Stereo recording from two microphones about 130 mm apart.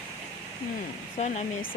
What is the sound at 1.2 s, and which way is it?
Speech, 65° left (ahead or behind).